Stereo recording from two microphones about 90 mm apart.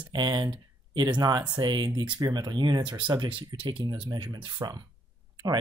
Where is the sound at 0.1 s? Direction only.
50° right (ahead or behind).